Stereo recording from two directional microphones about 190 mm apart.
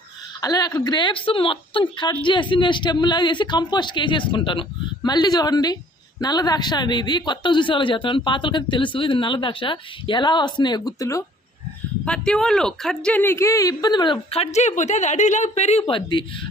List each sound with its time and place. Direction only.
0.4 s speech: 20° left (ahead or behind)
12.0 s speech: 5° left (ahead or behind); by 15.8 s 35° left (ahead or behind)
15.8 s speech: 25° left (ahead or behind)